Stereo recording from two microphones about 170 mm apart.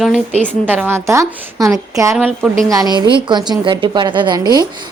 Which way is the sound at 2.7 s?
20° right (ahead or behind).